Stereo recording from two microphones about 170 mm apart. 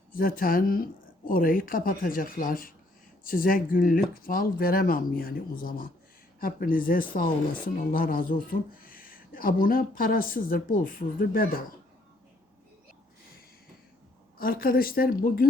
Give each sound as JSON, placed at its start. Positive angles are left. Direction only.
{"t": 0.1, "sound": "speech", "side_deg": 55}
{"t": 14.3, "sound": "speech", "side_deg": 60}